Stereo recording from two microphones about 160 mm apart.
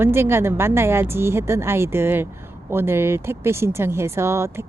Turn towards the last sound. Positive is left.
turn(degrees=-15)  # may be behind; listen again after turning